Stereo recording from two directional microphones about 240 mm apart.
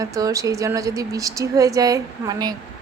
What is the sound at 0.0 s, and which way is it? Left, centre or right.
A woman's voice, centre.